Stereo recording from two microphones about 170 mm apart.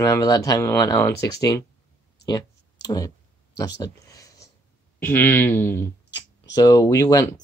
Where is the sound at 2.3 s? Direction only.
20° left (ahead or behind).